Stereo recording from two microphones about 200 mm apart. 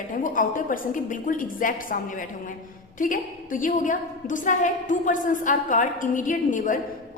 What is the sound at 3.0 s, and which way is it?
A woman's voice, 40° left (ahead or behind).